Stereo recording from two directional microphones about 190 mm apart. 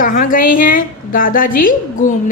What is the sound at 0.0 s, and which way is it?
A woman's voice, 45° left (ahead or behind).